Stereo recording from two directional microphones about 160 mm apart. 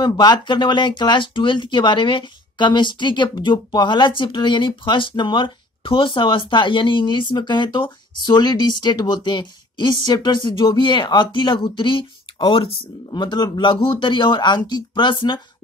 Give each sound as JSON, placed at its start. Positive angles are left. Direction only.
{"t": 0.0, "sound": "speech", "side_deg": 25}